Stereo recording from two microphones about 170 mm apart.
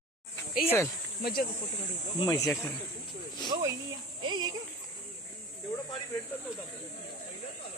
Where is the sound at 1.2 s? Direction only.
60° left (ahead or behind).